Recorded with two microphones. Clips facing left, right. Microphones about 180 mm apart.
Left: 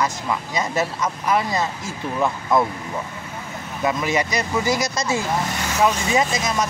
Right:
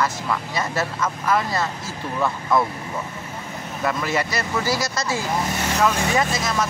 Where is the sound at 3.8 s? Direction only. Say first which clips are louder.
Left 2 dB; 15° left (ahead or behind).